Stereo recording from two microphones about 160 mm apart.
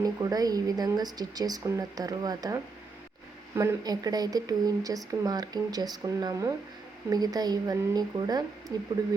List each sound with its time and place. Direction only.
0.0 s speech: 25° right (ahead or behind)